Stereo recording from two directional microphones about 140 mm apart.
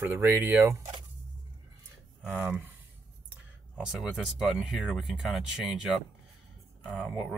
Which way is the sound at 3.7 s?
5° right (ahead or behind).